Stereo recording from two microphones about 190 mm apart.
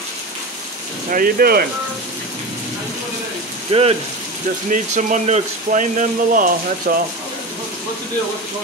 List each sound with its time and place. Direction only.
1.1 s speech: 50° right (ahead or behind)
3.7 s speech: 30° right (ahead or behind)
4.6 s speech: 40° right (ahead or behind)